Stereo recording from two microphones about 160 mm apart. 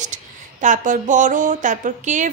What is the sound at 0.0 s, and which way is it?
A woman's voice, 50° right (ahead or behind).